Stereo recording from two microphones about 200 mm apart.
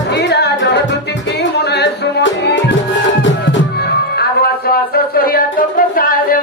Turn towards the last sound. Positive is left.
turn(degrees=45)  # may be behind; listen again after turning